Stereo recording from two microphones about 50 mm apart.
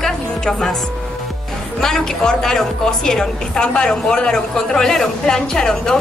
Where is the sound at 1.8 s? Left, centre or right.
Centre.